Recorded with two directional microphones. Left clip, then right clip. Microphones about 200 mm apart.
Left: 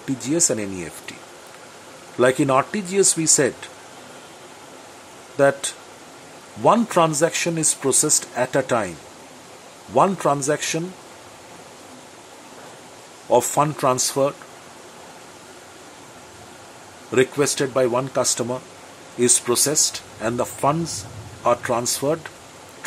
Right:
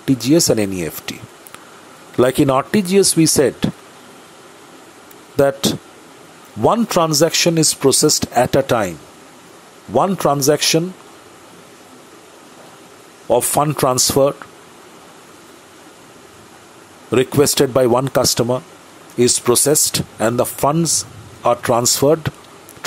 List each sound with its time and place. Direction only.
0.0 s speech: 25° right (ahead or behind)
2.1 s speech: 30° right (ahead or behind)
5.4 s speech: 30° right (ahead or behind)
9.9 s speech: 25° right (ahead or behind)
13.3 s speech: 30° right (ahead or behind)
17.1 s speech: 30° right (ahead or behind)